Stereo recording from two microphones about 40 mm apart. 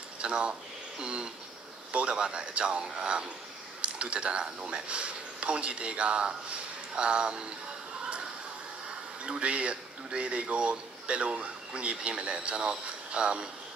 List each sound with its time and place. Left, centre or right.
0.2 s speech: right
8.8 s speech: right